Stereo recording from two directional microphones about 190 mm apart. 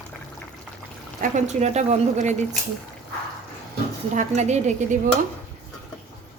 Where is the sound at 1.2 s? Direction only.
40° right (ahead or behind).